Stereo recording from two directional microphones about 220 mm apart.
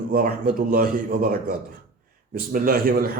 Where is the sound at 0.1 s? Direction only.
40° right (ahead or behind).